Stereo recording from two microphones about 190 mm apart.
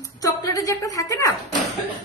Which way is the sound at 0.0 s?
15° left (ahead or behind).